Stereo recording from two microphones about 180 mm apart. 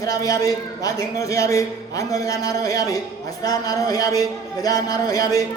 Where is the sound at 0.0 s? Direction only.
20° left (ahead or behind).